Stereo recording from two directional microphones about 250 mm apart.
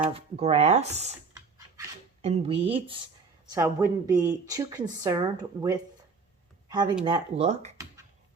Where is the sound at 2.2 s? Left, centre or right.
Right.